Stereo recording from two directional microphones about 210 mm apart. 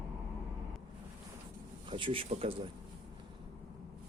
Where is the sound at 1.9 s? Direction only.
25° right (ahead or behind).